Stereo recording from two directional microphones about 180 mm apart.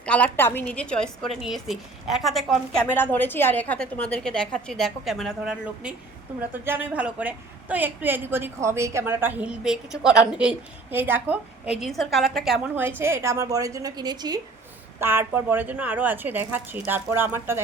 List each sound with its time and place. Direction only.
0.0 s a woman's voice: 10° left (ahead or behind); by 17.6 s 10° right (ahead or behind)